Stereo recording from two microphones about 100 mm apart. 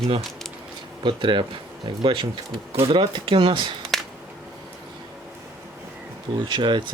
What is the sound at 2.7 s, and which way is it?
Speech, 65° right (ahead or behind).